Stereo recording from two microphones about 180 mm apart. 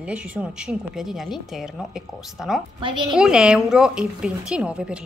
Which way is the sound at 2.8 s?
25° right (ahead or behind).